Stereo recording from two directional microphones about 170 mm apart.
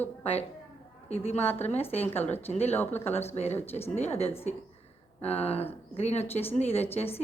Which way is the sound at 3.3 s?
40° left (ahead or behind).